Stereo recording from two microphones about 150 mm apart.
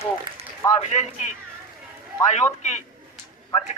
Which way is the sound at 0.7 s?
50° left (ahead or behind).